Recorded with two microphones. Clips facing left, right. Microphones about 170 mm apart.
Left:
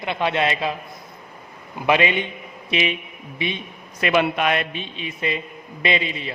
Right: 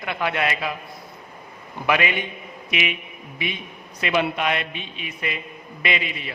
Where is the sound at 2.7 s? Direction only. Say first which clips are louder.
Left 4 dB; 30° left (ahead or behind).